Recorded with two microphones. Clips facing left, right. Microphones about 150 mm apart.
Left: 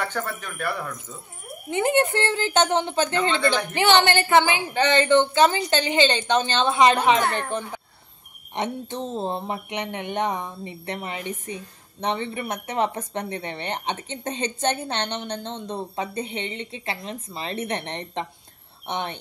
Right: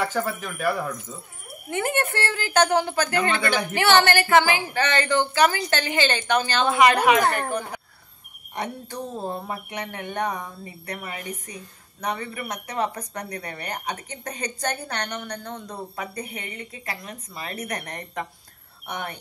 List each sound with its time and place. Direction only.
0.0 s speech: 5° right (ahead or behind)
1.7 s speech: 20° left (ahead or behind)
8.5 s speech: 25° left (ahead or behind)